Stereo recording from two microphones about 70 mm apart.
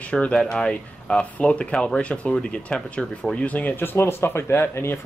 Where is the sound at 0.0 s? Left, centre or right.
Centre.